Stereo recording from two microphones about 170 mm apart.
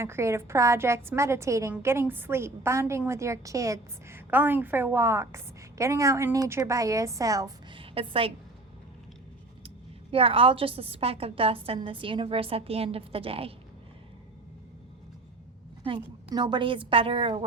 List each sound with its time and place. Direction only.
0.0 s a woman's voice: 15° right (ahead or behind); by 8.3 s 35° right (ahead or behind)
9.6 s a woman's voice: 35° right (ahead or behind)
15.9 s a woman's voice: 30° right (ahead or behind)